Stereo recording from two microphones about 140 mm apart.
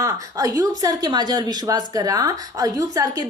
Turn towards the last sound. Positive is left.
turn(degrees=-25)  # may be behind; listen again after turning